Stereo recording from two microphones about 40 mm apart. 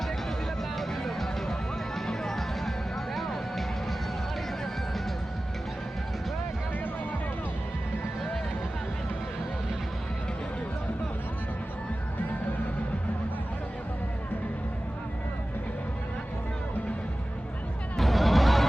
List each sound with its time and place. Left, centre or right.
0.8 s music: centre
17.9 s music: centre